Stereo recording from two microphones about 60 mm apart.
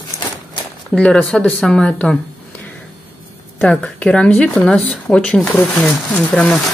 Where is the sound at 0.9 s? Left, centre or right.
Centre.